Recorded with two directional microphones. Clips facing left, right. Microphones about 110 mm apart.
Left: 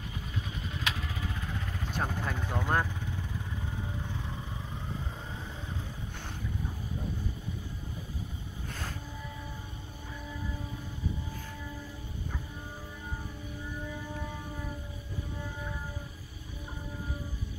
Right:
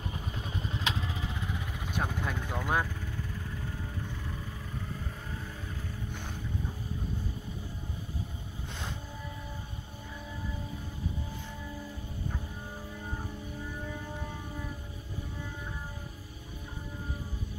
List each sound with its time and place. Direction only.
0.7 s vehicle: 25° right (ahead or behind); by 2.1 s 10° right (ahead or behind)
2.1 s vehicle: 5° left (ahead or behind)